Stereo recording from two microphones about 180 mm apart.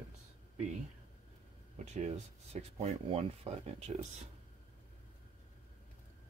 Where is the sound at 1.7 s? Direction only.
40° right (ahead or behind).